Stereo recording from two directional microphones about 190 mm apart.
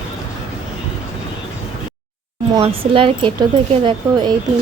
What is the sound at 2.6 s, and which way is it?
Speech, 25° right (ahead or behind).